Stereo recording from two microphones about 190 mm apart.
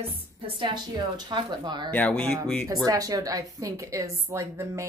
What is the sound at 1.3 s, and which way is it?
Speech, 25° right (ahead or behind).